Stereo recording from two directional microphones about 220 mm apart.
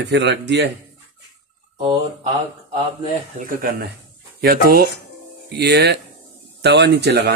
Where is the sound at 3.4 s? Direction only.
40° right (ahead or behind).